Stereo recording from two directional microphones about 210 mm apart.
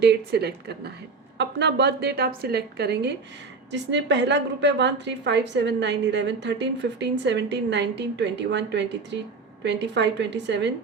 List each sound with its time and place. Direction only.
0.0 s a woman's voice: 50° right (ahead or behind)